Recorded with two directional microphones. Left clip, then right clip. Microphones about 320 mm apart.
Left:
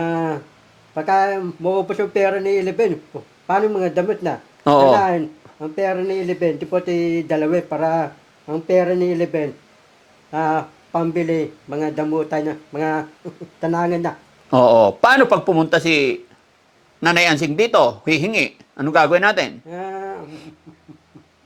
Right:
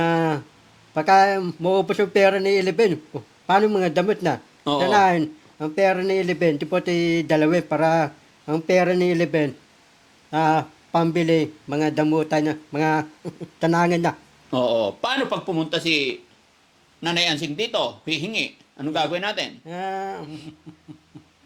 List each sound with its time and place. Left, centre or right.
0.0 s a sound: right
0.9 s speech: right
4.6 s a man's voice: left
4.9 s speech: right
14.5 s a man's voice: left
19.6 s speech: right